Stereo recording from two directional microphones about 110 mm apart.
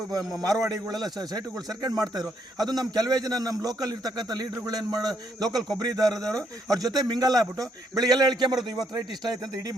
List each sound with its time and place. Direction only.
0.6 s a man's voice: 35° right (ahead or behind)
8.5 s speech: 5° right (ahead or behind)
8.9 s a man's voice: 35° right (ahead or behind)